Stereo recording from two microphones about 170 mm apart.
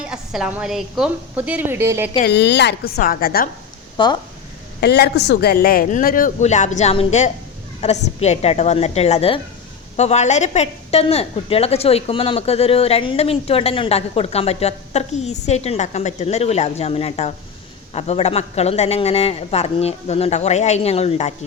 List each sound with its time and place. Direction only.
0.1 s a woman's voice: 5° right (ahead or behind)
2.2 s a woman's voice: 85° left; by 3.5 s 60° left (ahead or behind)
3.9 s speech: 25° left (ahead or behind)
4.8 s a woman's voice: 70° left (ahead or behind); by 21.3 s 40° left (ahead or behind)